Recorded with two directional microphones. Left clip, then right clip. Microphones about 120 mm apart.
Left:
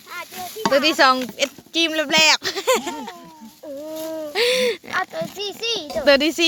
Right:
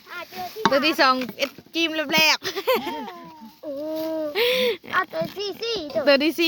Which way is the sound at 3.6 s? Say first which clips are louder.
Right 1 dB; 90° right.